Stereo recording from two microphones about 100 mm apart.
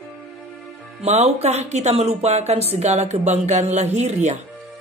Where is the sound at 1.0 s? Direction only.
90° right.